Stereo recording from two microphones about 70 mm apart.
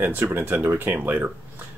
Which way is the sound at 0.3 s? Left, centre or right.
Right.